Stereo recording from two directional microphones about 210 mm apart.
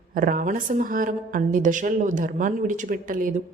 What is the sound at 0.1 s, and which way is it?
Speech, 40° right (ahead or behind).